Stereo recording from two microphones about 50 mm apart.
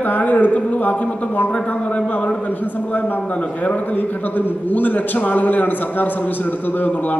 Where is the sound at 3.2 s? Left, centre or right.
Left.